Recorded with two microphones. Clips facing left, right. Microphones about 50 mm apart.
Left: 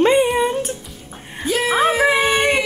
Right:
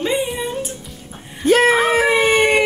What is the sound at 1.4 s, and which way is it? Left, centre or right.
Speech, right.